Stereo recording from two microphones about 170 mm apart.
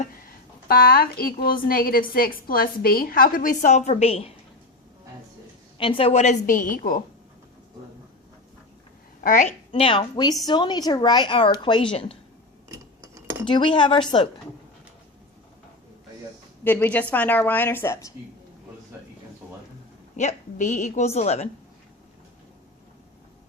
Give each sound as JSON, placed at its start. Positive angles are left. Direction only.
{"t": 0.7, "sound": "a woman's voice", "side_deg": 60}
{"t": 5.7, "sound": "a woman's voice", "side_deg": 30}
{"t": 9.2, "sound": "a woman's voice", "side_deg": 50}
{"t": 9.7, "sound": "speech", "side_deg": 30}
{"t": 12.6, "sound": "cutlery", "side_deg": -20}
{"t": 13.5, "sound": "speech", "side_deg": 30}
{"t": 16.6, "sound": "speech", "side_deg": 10}
{"t": 20.1, "sound": "a woman's voice", "side_deg": 45}